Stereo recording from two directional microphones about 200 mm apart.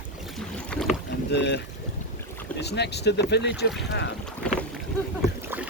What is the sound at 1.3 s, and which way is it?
Speech, 60° left (ahead or behind).